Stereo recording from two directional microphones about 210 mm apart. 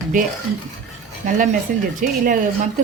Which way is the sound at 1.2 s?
40° right (ahead or behind).